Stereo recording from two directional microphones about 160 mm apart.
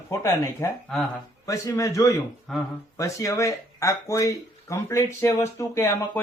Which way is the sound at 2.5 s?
Centre (ahead or behind).